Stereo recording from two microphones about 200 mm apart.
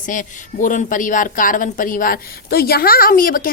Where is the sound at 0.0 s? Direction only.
40° left (ahead or behind).